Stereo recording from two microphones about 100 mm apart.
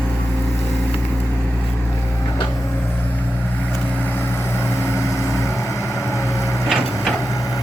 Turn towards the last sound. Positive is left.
turn(degrees=0)  # may be behind; listen again after turning